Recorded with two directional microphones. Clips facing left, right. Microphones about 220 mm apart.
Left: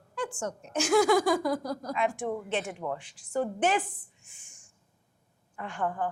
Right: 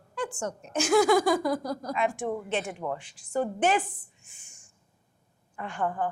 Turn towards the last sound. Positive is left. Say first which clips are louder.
# right 2 dB
turn(degrees=-20)  # may be behind; listen again after turning